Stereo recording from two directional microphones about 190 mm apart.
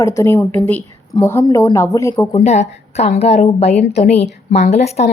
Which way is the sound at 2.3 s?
35° left (ahead or behind).